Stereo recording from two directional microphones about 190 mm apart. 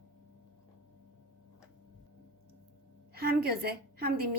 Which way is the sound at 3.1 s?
55° right (ahead or behind).